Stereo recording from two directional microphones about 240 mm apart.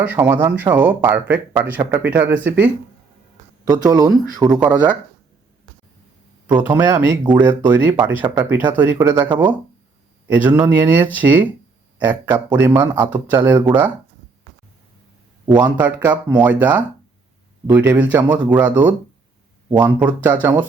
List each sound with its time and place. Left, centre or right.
0.0 s speech: centre
6.6 s speech: centre
15.5 s speech: centre